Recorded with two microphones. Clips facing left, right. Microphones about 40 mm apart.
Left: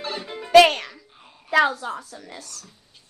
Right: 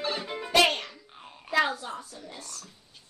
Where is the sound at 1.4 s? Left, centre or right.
Left.